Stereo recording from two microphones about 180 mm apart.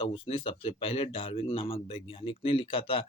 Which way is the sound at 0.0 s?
30° left (ahead or behind).